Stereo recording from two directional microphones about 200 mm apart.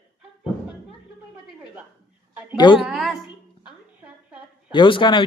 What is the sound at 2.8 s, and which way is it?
Speech, 5° right (ahead or behind).